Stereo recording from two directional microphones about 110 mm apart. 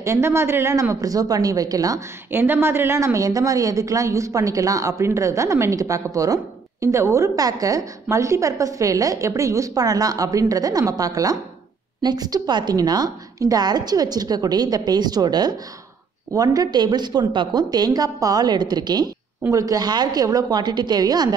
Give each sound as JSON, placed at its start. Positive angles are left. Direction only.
{"t": 0.0, "sound": "speech", "side_deg": -25}
{"t": 2.3, "sound": "a woman's voice", "side_deg": -20}